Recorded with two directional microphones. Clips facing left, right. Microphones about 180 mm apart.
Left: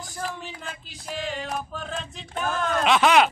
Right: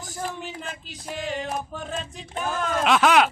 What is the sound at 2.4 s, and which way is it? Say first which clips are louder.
Speech: even; 5° right (ahead or behind).